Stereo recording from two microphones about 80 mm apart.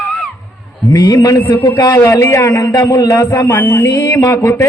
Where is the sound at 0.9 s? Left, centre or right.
Left.